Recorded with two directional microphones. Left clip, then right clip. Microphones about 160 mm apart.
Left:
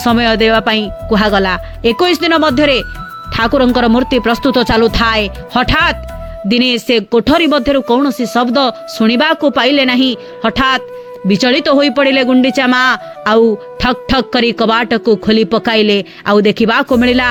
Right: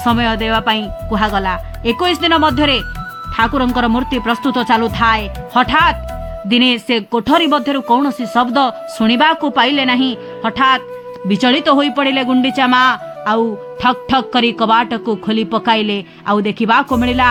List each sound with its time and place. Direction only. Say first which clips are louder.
0.0 s speech: left 5 dB; 30° left (ahead or behind)
3.3 s speech: left 4 dB; 35° left (ahead or behind)